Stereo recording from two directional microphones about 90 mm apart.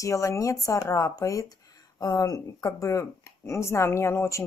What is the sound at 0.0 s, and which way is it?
Speech, 35° left (ahead or behind).